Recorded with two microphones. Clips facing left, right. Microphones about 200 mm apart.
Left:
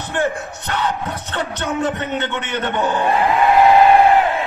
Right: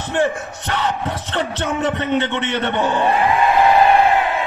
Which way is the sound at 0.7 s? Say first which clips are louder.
Right 1 dB; 30° right (ahead or behind).